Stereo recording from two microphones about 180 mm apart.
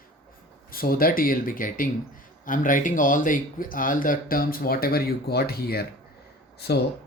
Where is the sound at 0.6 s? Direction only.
55° left (ahead or behind).